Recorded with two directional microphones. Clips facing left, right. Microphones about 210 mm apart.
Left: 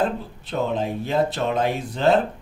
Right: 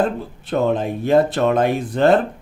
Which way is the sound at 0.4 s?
55° right (ahead or behind).